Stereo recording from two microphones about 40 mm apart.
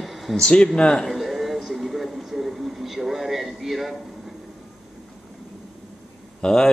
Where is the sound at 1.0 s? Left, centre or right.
Centre.